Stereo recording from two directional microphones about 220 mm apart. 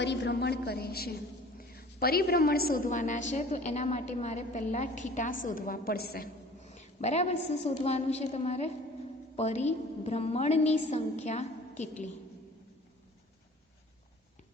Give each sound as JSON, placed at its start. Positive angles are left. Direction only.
{"t": 0.0, "sound": "a woman's voice", "side_deg": 50}
{"t": 6.7, "sound": "a woman's voice", "side_deg": 30}